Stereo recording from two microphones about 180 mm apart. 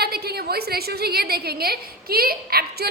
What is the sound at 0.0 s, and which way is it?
A woman's voice, 60° right (ahead or behind).